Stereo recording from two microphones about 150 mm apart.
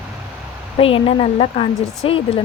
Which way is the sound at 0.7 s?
35° left (ahead or behind).